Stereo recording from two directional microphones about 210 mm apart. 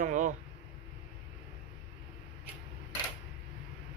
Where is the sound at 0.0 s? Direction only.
35° right (ahead or behind).